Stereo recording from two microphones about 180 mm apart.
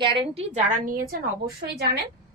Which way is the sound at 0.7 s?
50° right (ahead or behind).